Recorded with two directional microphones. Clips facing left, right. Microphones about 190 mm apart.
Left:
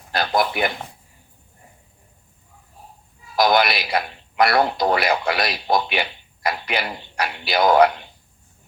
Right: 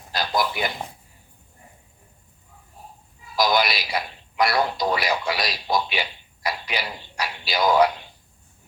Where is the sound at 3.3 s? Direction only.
55° left (ahead or behind).